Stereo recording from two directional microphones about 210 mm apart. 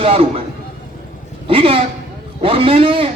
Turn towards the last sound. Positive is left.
turn(degrees=-25)  # may be behind; listen again after turning